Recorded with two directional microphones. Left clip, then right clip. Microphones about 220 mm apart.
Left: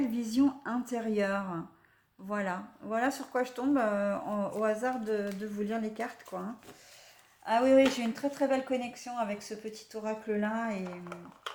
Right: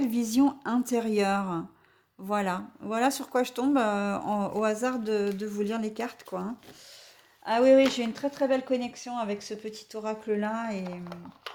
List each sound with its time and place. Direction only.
0.0 s speech: 45° right (ahead or behind)